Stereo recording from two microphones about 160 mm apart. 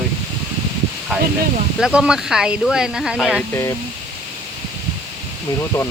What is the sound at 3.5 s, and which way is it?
Speech, 15° left (ahead or behind).